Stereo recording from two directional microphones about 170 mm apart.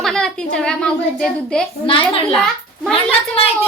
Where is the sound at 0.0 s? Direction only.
5° left (ahead or behind).